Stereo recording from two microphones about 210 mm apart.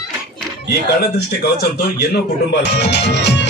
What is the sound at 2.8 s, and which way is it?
Speech, 55° left (ahead or behind).